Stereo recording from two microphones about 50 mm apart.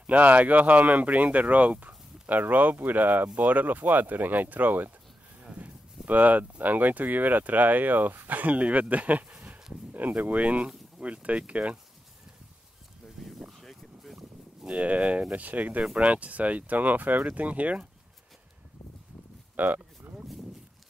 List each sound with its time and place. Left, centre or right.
0.0 s speech: right
13.2 s a sound: centre
14.6 s speech: right
15.8 s speech: centre
16.1 s speech: right
19.5 s speech: right